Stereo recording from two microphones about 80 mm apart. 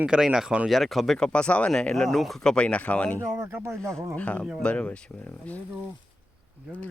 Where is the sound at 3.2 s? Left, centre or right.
Right.